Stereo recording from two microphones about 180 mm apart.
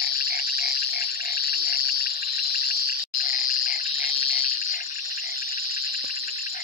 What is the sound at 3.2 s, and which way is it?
Frog, 50° left (ahead or behind).